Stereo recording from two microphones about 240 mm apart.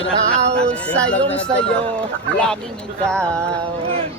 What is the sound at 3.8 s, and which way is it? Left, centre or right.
Speech, right.